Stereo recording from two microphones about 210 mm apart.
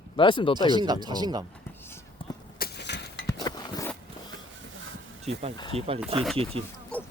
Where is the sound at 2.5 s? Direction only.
50° left (ahead or behind).